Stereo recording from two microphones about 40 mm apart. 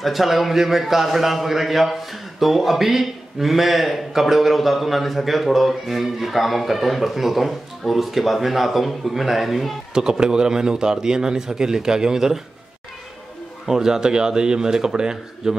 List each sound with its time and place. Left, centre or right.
0.0 s a man's voice: centre
9.9 s speech: centre
13.7 s speech: centre